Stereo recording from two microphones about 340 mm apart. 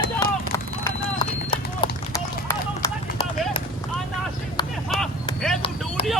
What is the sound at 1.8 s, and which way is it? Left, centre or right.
Run, centre.